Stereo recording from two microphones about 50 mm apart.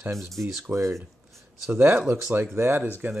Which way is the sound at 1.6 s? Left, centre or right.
Right.